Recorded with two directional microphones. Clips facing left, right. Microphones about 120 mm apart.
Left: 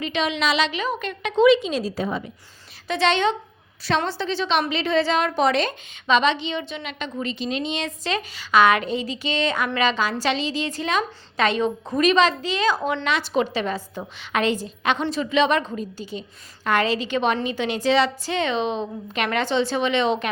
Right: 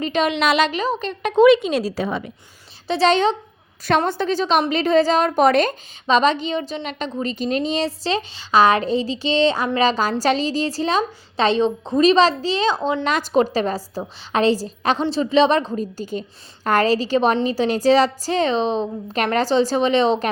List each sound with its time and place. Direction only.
0.0 s speech: 45° right (ahead or behind)
1.2 s a woman's voice: 55° right (ahead or behind); by 2.3 s 85° right
2.8 s a woman's voice: 35° right (ahead or behind)
3.8 s a woman's voice: 50° right (ahead or behind); by 13.0 s 25° right (ahead or behind)
13.1 s a woman's voice: 40° right (ahead or behind)